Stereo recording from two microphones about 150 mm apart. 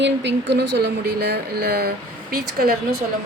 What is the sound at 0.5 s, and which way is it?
Speech, 90° right.